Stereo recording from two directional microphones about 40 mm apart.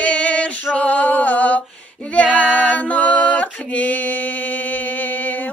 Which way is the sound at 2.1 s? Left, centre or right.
Left.